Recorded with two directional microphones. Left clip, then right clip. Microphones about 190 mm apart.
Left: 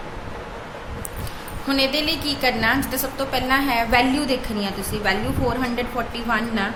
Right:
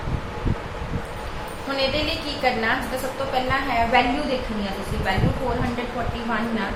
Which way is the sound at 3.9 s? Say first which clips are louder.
Left 2 dB; 65° left (ahead or behind).